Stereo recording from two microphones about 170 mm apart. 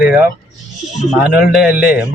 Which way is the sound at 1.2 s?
5° right (ahead or behind).